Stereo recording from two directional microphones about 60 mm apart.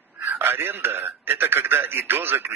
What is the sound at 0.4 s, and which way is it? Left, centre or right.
A man's voice, right.